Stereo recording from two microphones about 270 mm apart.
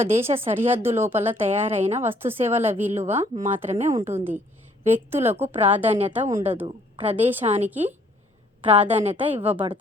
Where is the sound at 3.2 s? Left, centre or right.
Right.